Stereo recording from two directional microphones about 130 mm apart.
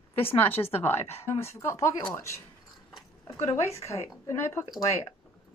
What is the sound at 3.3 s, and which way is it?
Speech, 20° left (ahead or behind).